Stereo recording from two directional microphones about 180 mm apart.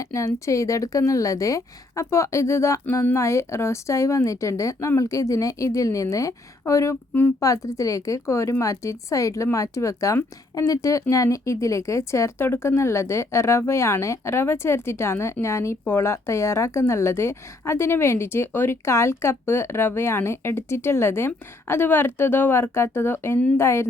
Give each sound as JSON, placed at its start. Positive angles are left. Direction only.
{"t": 0.0, "sound": "speech", "side_deg": 15}